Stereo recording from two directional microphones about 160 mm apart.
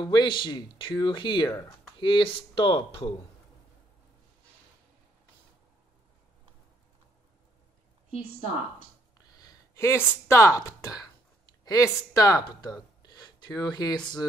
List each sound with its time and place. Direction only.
0.0 s speech: 30° left (ahead or behind)
9.4 s speech: 20° left (ahead or behind)